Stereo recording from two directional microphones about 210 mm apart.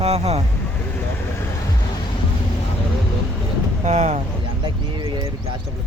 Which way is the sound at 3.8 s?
35° right (ahead or behind).